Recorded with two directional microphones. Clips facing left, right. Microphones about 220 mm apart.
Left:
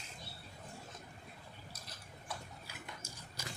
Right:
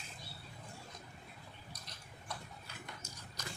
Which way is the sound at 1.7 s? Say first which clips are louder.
Left 1 dB; 5° left (ahead or behind).